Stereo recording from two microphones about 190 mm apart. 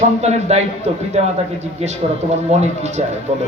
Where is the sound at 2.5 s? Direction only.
35° right (ahead or behind).